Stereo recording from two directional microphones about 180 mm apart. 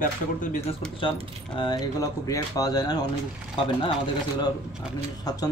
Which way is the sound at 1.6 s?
20° left (ahead or behind).